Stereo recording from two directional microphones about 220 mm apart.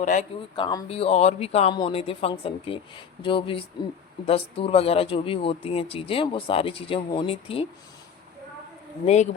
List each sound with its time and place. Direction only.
0.0 s speech: 35° left (ahead or behind)
0.5 s speech: 20° left (ahead or behind)
9.0 s speech: 30° left (ahead or behind)